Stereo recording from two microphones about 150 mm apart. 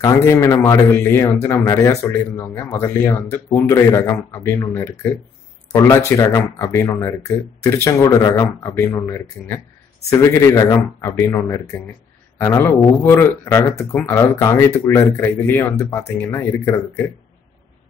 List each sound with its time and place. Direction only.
0.0 s speech: 20° left (ahead or behind)